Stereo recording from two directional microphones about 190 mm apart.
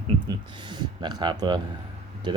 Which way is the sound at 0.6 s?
25° right (ahead or behind).